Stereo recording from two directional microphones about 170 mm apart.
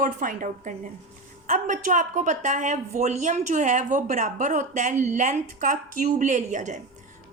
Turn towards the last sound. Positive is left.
turn(degrees=-45)  # may be behind; listen again after turning